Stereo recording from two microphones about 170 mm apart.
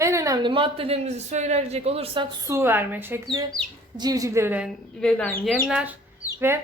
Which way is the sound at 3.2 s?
20° right (ahead or behind).